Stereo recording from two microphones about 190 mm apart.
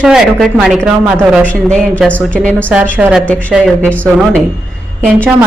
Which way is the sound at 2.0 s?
5° left (ahead or behind).